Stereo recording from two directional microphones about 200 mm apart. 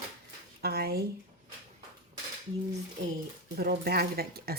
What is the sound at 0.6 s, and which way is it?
Speech, 50° right (ahead or behind).